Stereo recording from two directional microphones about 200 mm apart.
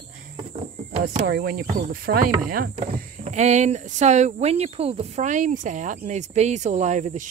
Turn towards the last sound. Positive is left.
turn(degrees=-35)  # may be behind; listen again after turning